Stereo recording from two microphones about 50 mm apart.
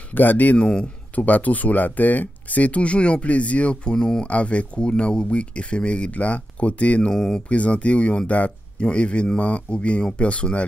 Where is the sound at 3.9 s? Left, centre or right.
Centre.